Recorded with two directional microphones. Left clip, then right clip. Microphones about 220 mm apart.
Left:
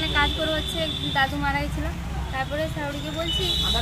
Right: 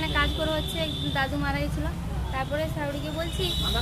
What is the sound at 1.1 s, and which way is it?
Speech, 25° right (ahead or behind).